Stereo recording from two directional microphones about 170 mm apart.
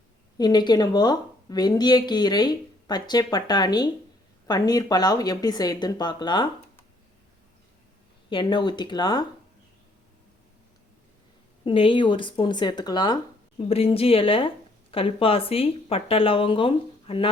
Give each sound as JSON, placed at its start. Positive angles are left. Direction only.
{"t": 0.3, "sound": "a woman's voice", "side_deg": 25}
{"t": 8.3, "sound": "a woman's voice", "side_deg": 30}
{"t": 11.6, "sound": "a woman's voice", "side_deg": 30}
{"t": 13.6, "sound": "a woman's voice", "side_deg": 35}